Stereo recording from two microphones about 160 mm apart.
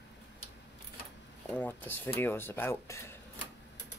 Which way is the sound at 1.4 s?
10° left (ahead or behind).